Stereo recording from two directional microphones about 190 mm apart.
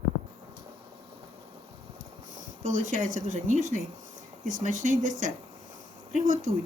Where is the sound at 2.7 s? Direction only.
45° right (ahead or behind).